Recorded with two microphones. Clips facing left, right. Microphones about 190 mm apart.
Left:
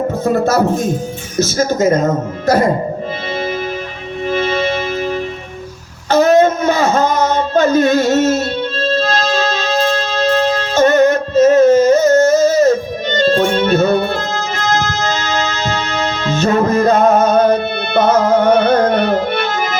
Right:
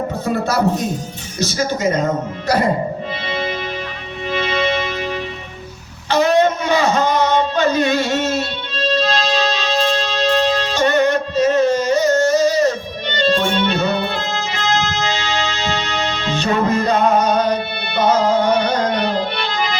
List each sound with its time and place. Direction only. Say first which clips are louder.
0.4 s speech: left 4 dB; 45° left (ahead or behind)
4.3 s music: left 3 dB; 45° left (ahead or behind)
6.1 s a sound: left 4 dB; 45° left (ahead or behind)